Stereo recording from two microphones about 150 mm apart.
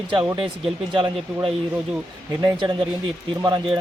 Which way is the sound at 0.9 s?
35° right (ahead or behind).